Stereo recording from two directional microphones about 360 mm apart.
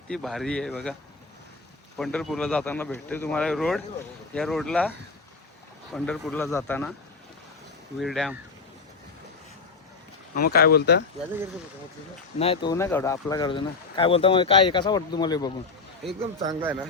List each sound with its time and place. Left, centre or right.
0.1 s speech: centre
2.0 s speech: centre
7.9 s speech: centre
10.3 s speech: left
12.4 s speech: centre
16.4 s a man's voice: centre